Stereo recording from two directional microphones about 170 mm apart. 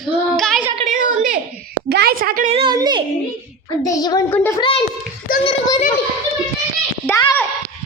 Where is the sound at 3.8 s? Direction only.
25° left (ahead or behind).